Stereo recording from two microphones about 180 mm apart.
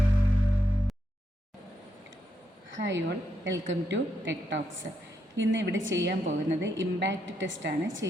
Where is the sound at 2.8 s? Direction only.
90° right.